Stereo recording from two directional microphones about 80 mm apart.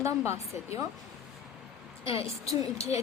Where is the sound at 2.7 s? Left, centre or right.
Right.